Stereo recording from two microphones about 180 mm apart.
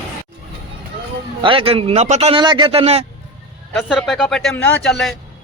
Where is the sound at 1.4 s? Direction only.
30° right (ahead or behind).